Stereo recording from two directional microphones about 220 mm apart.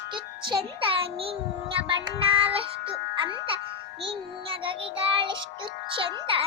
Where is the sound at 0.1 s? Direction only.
25° right (ahead or behind).